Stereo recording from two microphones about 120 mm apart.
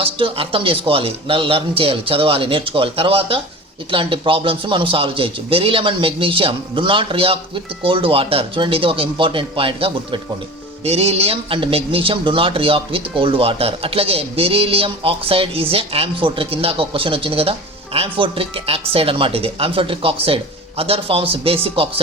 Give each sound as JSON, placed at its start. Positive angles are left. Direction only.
{"t": 0.0, "sound": "a man's voice", "side_deg": -50}
{"t": 10.8, "sound": "a man's voice", "side_deg": -60}